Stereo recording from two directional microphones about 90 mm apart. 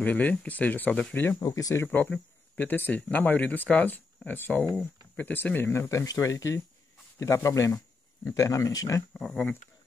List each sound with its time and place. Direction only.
0.0 s speech: 15° left (ahead or behind)
1.4 s speech: 40° left (ahead or behind)
1.9 s speech: 20° left (ahead or behind); by 9.0 s 35° left (ahead or behind)
9.2 s speech: 5° left (ahead or behind)